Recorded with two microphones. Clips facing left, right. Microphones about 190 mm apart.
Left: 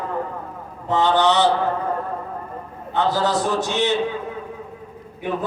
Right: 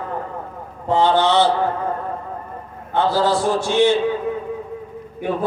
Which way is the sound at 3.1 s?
20° left (ahead or behind).